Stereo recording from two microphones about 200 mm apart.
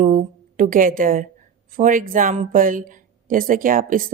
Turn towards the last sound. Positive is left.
turn(degrees=-45)  # may be behind; listen again after turning